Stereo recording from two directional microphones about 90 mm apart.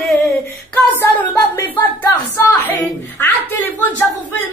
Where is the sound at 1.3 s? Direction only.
25° left (ahead or behind).